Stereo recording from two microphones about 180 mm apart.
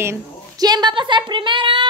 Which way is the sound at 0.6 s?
25° right (ahead or behind).